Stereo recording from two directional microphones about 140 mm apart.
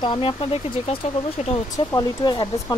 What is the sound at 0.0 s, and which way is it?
Speech, 35° left (ahead or behind).